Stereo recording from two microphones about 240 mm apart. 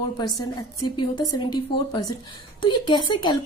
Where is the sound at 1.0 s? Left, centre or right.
Centre.